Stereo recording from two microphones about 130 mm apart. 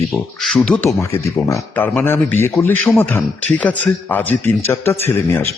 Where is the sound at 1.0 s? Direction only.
20° left (ahead or behind).